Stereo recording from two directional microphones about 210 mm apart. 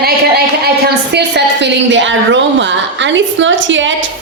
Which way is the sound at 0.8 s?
50° right (ahead or behind).